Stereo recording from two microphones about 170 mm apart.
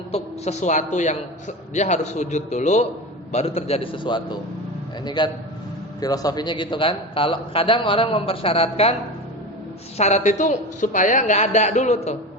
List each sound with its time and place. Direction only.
0.1 s a man's voice: 45° left (ahead or behind)
10.0 s a man's voice: 45° left (ahead or behind)